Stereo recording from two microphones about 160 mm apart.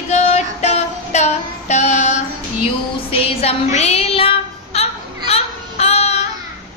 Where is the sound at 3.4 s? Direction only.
40° left (ahead or behind).